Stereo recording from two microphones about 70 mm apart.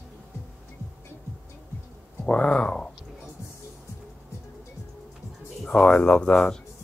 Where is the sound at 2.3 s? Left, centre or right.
Centre.